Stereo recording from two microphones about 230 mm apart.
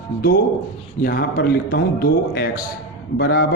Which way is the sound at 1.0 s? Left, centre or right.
Left.